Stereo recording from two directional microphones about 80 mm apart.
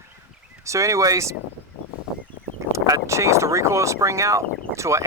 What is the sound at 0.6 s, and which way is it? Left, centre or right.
Speech, right.